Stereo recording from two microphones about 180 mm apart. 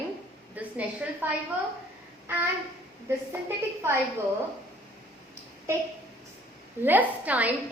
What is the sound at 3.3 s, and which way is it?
Speech, 15° right (ahead or behind).